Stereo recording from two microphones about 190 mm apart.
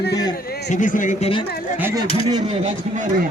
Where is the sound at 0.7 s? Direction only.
45° left (ahead or behind).